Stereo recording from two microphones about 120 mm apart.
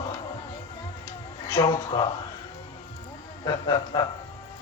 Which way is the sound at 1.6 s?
35° left (ahead or behind).